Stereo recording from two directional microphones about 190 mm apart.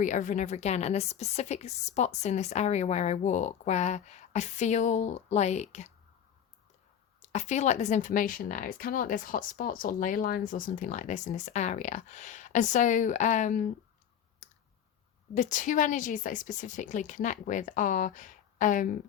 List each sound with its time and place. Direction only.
0.0 s a woman's voice: 40° left (ahead or behind)
7.2 s a woman's voice: 40° left (ahead or behind)
15.4 s a woman's voice: 40° left (ahead or behind)